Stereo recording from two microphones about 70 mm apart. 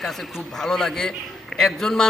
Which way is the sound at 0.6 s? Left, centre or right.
Centre.